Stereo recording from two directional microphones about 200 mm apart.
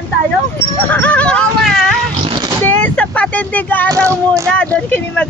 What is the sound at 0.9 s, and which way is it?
Speech, 5° left (ahead or behind).